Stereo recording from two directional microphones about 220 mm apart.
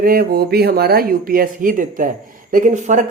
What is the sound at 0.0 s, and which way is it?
Speech, 40° right (ahead or behind).